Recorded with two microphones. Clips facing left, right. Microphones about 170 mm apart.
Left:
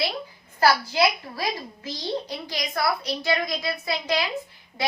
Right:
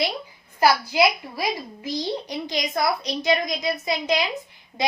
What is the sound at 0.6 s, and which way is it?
A woman's voice, 15° right (ahead or behind).